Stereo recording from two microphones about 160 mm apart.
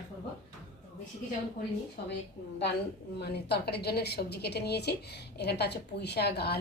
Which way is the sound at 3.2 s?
90° left.